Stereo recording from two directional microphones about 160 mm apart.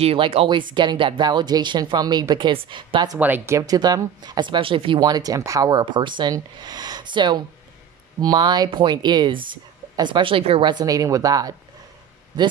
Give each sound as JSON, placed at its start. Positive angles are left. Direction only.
{"t": 0.0, "sound": "speech", "side_deg": -35}
{"t": 3.2, "sound": "speech", "side_deg": -10}